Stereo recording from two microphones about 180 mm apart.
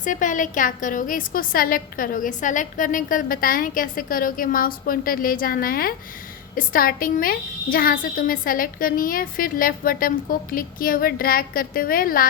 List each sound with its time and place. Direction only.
0.0 s a woman's voice: 45° left (ahead or behind)